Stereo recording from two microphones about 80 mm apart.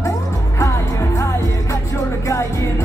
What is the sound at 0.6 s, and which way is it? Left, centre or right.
Music, left.